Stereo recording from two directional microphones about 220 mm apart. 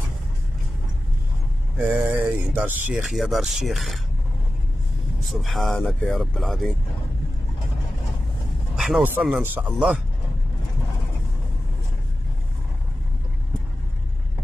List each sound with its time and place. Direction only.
1.8 s speech: 10° right (ahead or behind)
5.3 s speech: centre (ahead or behind)
8.7 s speech: centre (ahead or behind)